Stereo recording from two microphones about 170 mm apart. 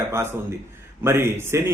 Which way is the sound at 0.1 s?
15° right (ahead or behind).